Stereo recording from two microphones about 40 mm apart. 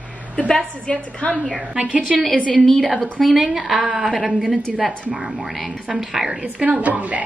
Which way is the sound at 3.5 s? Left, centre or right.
Centre.